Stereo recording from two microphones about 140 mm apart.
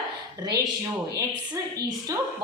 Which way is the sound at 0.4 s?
30° right (ahead or behind).